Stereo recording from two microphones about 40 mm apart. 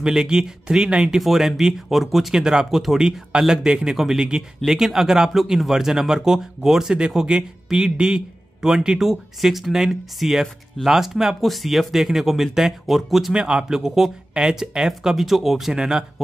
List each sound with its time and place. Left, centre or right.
0.0 s speech: centre
1.2 s speech: centre
2.3 s speech: centre
3.0 s speech: centre
13.3 s speech: centre
15.7 s speech: centre